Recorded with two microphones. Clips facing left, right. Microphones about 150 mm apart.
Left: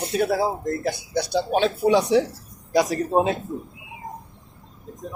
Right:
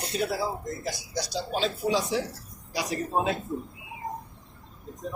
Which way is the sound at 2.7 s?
45° left (ahead or behind).